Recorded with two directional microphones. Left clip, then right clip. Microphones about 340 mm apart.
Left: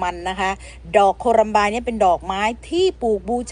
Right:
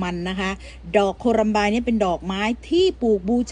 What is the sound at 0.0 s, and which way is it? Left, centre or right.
Speech, centre.